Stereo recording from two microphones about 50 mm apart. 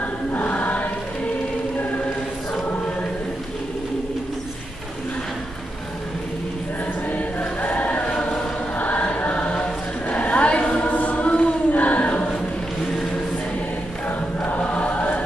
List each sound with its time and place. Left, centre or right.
0.0 s choir: left
2.5 s choir: left
7.1 s choir: left
8.1 s music: centre
8.7 s choir: left
14.0 s choir: left